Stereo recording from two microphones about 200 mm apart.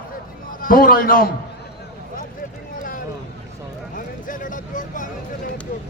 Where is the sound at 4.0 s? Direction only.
40° left (ahead or behind).